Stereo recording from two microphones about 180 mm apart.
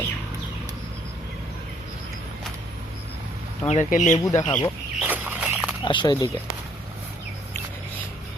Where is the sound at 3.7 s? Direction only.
45° left (ahead or behind).